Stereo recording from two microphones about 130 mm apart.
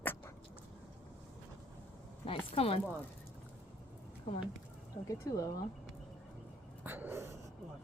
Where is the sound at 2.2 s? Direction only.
50° left (ahead or behind).